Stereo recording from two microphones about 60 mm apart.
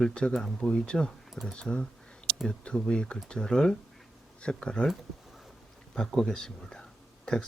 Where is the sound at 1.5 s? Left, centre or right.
Centre.